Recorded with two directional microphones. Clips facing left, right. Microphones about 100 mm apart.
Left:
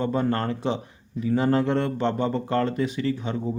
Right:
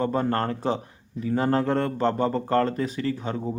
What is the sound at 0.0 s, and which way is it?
Speech, 40° right (ahead or behind).